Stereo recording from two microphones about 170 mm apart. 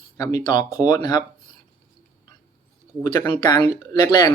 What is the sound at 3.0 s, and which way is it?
Speech, 30° left (ahead or behind).